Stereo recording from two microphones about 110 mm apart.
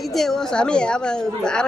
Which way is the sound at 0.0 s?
Centre (ahead or behind).